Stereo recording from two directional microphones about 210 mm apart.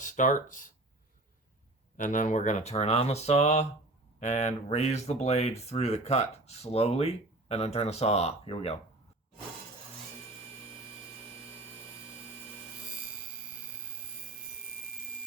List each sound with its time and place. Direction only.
0.0 s speech: 35° left (ahead or behind)
2.0 s speech: 35° left (ahead or behind)